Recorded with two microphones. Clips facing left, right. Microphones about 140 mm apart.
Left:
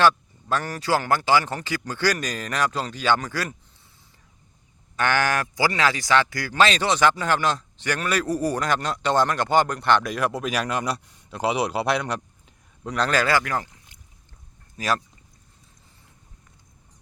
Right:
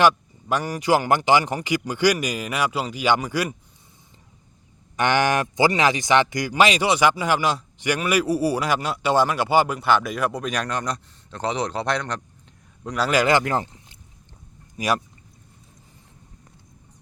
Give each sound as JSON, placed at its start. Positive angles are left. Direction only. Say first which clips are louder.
{"t": 0.0, "sound": "speech", "louder": "right 1 dB", "side_deg": -15}
{"t": 4.9, "sound": "a man's voice", "louder": "right 3 dB", "side_deg": -20}
{"t": 13.1, "sound": "speech", "louder": "right 4 dB", "side_deg": -15}
{"t": 14.8, "sound": "speech", "louder": "right 2 dB", "side_deg": -15}